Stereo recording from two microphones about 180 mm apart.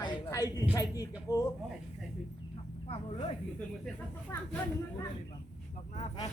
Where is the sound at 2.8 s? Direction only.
35° left (ahead or behind).